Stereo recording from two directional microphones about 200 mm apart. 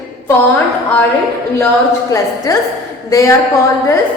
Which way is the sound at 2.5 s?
20° left (ahead or behind).